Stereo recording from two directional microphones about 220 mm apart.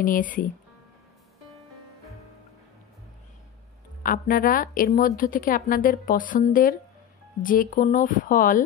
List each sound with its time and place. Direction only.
0.0 s a woman's voice: 40° left (ahead or behind)
4.0 s a woman's voice: 40° left (ahead or behind)